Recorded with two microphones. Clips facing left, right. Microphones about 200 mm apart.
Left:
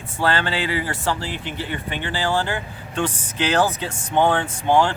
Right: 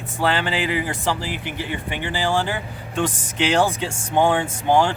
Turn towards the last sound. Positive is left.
turn(degrees=-10)  # may be behind; listen again after turning